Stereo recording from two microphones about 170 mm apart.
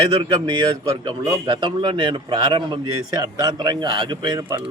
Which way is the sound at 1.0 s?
30° right (ahead or behind).